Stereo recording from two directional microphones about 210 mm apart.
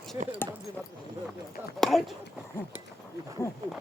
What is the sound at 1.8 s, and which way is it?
Speech, centre (ahead or behind).